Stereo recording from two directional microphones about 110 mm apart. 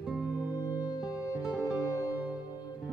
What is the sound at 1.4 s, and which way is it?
Music, 5° right (ahead or behind).